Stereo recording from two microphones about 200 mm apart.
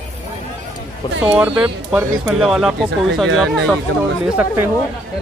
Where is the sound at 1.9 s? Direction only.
Centre (ahead or behind).